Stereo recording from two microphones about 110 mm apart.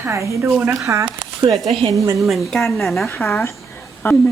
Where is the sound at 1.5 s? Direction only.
Centre (ahead or behind).